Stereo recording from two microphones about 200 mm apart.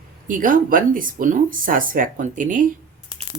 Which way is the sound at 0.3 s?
40° right (ahead or behind).